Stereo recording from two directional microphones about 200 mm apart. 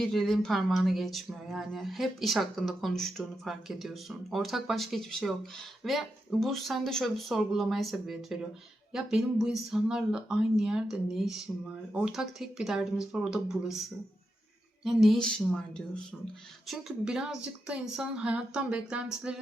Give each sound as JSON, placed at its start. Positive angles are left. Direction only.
{"t": 0.0, "sound": "speech", "side_deg": 0}
{"t": 14.8, "sound": "speech", "side_deg": 0}